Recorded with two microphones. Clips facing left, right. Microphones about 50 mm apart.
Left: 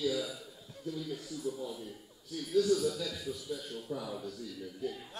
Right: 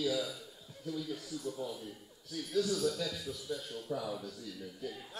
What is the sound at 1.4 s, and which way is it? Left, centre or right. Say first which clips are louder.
Speech: left 3 dB; centre.